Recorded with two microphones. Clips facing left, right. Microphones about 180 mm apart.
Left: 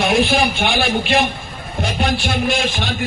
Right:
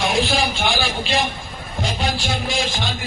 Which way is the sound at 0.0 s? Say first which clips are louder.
Left 4 dB; 60° left (ahead or behind).